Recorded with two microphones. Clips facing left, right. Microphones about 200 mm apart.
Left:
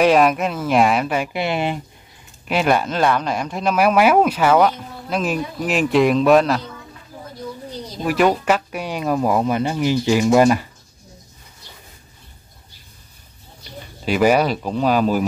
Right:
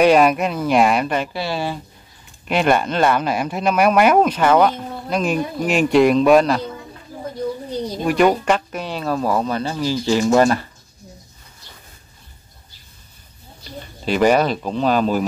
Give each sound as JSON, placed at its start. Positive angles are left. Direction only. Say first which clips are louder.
{"t": 0.0, "sound": "speech", "louder": "right 1 dB", "side_deg": 0}
{"t": 1.3, "sound": "speech", "louder": "left 2 dB", "side_deg": 20}
{"t": 2.4, "sound": "speech", "louder": "right 1 dB", "side_deg": 0}
{"t": 8.0, "sound": "speech", "louder": "right 1 dB", "side_deg": 0}
{"t": 14.0, "sound": "speech", "louder": "even", "side_deg": 10}